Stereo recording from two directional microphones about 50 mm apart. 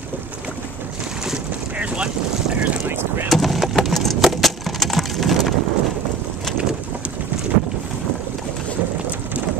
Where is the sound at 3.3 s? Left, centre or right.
Centre.